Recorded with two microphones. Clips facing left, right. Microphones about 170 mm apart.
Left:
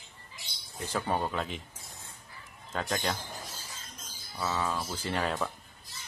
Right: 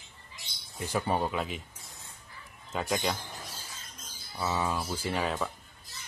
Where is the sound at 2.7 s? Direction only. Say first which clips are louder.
Right 2 dB; 10° right (ahead or behind).